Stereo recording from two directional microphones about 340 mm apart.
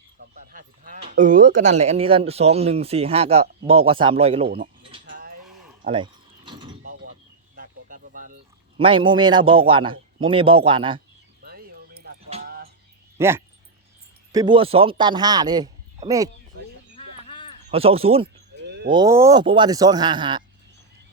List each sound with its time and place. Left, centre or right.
0.2 s speech: right
5.8 s mechanisms: centre
7.5 s a sound: right
8.8 s speech: centre
11.4 s music: right
13.1 s speech: centre
16.9 s a sound: centre
17.7 s speech: centre
18.6 s a sound: right
18.9 s speech: centre